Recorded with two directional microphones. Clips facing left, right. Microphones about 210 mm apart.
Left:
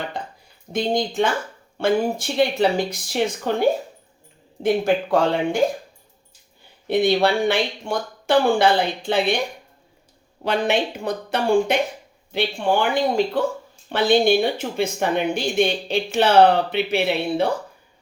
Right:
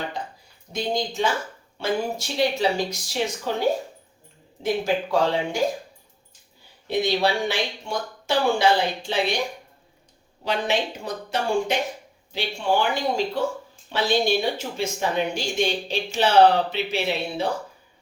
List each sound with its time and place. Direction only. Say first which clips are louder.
0.1 s a sound: left 1 dB; 55° left (ahead or behind)
0.7 s speech: left 4 dB; 55° left (ahead or behind)
4.6 s speech: left 4 dB; 55° left (ahead or behind)
6.8 s speech: left 4 dB; 55° left (ahead or behind)
10.4 s speech: left 4 dB; 55° left (ahead or behind)